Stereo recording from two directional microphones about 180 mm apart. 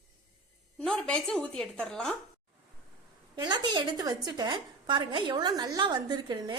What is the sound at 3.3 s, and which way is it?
A woman's voice, 25° right (ahead or behind).